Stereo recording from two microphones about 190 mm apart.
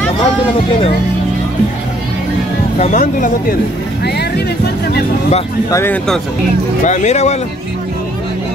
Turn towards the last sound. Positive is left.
turn(degrees=35)  # may be behind; listen again after turning